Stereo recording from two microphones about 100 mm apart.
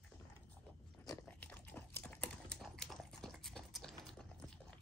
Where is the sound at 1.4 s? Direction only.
20° left (ahead or behind).